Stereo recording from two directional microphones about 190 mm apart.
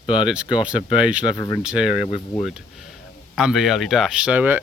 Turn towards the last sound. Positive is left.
turn(degrees=-10)  # may be behind; listen again after turning